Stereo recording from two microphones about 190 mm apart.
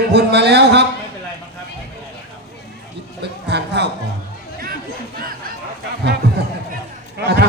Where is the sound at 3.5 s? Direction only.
65° right (ahead or behind).